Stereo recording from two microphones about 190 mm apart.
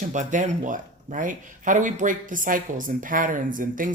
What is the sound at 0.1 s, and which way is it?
Speech, 40° right (ahead or behind).